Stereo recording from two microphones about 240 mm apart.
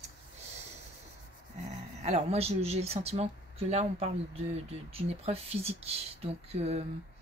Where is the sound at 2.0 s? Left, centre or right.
Right.